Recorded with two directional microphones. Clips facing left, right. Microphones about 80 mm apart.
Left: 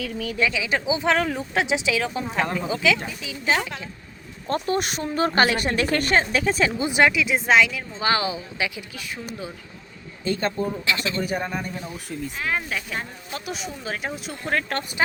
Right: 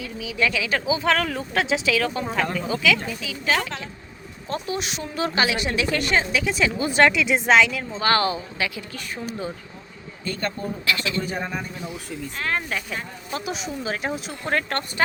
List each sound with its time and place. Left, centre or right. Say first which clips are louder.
0.0 s speech: left 4 dB; left
0.3 s speech: right 1 dB; centre
4.4 s speech: left 4 dB; left
6.7 s speech: right 1 dB; centre
7.0 s speech: right 2 dB; centre
9.0 s speech: right 3 dB; centre
10.2 s speech: left 4 dB; left
11.3 s speech: left 2 dB; centre